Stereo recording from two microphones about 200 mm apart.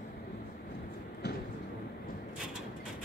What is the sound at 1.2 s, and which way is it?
Train, 55° left (ahead or behind).